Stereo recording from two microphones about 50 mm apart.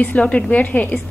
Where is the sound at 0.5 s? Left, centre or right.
Left.